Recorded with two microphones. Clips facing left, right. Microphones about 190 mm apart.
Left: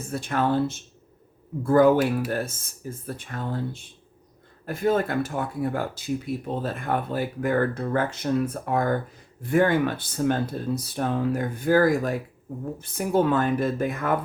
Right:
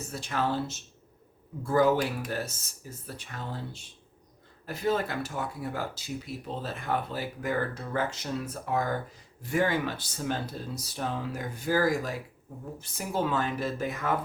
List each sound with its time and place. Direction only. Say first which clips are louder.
0.1 s speech: left 6 dB; 55° left (ahead or behind)